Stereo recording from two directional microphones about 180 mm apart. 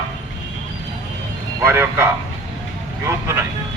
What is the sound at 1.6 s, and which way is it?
A man's voice, 15° right (ahead or behind).